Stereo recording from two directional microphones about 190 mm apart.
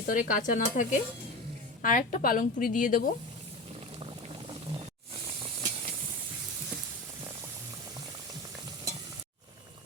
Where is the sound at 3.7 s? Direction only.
30° right (ahead or behind).